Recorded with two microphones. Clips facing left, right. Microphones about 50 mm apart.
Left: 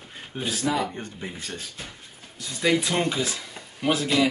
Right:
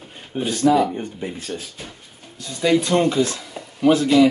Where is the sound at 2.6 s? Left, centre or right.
Centre.